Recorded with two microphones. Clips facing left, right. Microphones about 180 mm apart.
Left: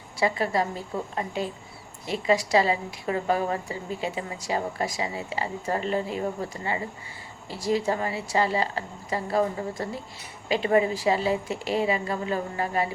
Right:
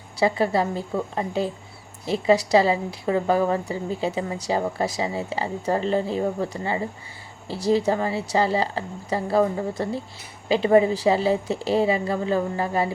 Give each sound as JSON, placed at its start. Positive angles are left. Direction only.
{"t": 0.3, "sound": "a woman's voice", "side_deg": -30}